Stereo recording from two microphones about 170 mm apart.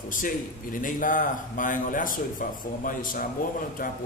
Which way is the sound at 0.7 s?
50° left (ahead or behind).